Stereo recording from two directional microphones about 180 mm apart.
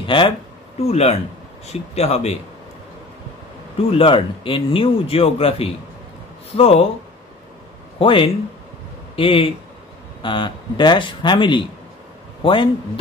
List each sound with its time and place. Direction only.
0.0 s speech: 30° left (ahead or behind)
3.9 s speech: 30° left (ahead or behind)
8.0 s speech: 30° left (ahead or behind)